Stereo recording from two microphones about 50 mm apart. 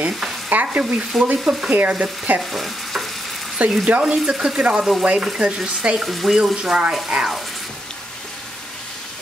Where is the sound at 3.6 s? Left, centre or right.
Right.